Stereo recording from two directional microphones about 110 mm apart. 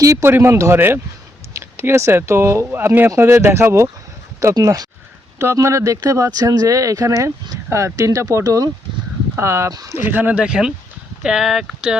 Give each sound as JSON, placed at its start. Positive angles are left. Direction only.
{"t": 0.0, "sound": "speech", "side_deg": -25}
{"t": 10.1, "sound": "speech", "side_deg": -15}